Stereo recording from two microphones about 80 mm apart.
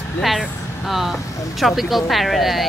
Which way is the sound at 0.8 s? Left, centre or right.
Centre.